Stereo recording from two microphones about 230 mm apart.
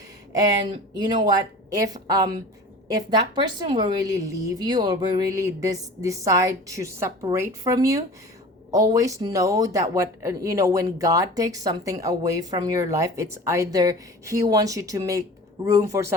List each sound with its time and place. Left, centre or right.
0.9 s a woman's voice: centre